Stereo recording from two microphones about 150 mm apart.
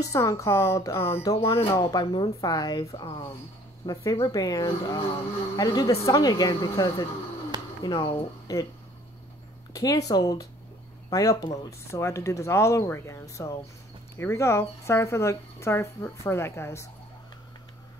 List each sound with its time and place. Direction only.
0.0 s speech: 20° left (ahead or behind)
1.6 s speech: 30° left (ahead or behind)
9.8 s speech: 25° left (ahead or behind)